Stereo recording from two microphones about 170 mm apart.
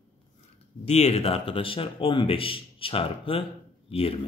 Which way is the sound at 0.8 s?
40° left (ahead or behind).